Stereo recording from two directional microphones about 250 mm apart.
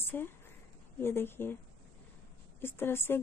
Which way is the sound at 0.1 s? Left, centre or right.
Centre.